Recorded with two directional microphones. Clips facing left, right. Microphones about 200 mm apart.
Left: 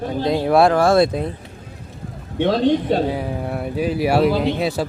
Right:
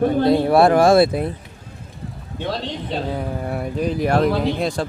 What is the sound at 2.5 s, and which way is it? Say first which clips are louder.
Speech: left 12 dB; 50° left (ahead or behind).